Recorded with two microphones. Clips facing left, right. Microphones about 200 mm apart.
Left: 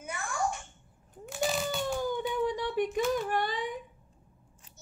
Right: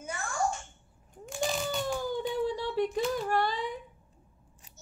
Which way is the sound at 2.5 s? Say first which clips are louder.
Even; 15° left (ahead or behind).